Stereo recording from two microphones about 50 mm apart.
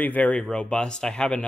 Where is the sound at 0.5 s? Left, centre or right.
Centre.